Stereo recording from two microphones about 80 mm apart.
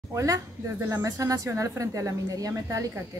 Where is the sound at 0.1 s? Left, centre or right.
Right.